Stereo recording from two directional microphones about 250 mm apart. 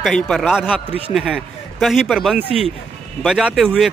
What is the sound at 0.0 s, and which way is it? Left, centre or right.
Speech, centre.